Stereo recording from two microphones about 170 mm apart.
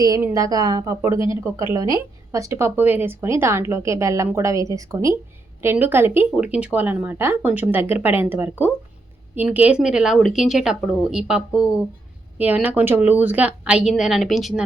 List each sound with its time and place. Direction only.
0.0 s a woman's voice: 20° right (ahead or behind); by 14.6 s centre (ahead or behind)